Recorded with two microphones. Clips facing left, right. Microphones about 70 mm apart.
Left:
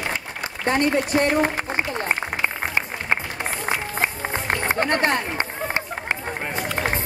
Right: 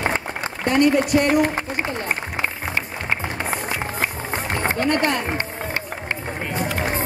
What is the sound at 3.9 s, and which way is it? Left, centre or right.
Music, left.